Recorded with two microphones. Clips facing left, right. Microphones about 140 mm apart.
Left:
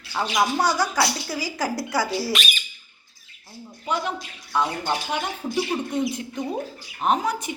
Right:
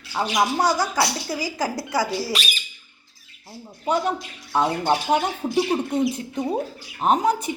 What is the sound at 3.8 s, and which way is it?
Speech, 40° right (ahead or behind).